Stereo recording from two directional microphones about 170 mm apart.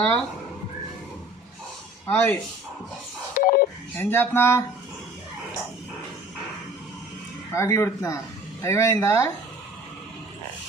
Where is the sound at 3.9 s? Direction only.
10° left (ahead or behind).